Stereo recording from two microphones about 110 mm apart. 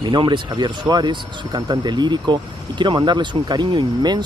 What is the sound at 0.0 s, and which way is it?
Speech, 45° right (ahead or behind).